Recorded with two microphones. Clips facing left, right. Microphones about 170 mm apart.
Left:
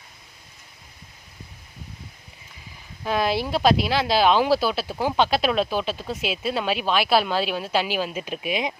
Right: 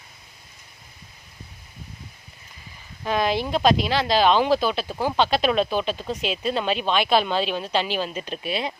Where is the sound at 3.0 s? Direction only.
5° left (ahead or behind).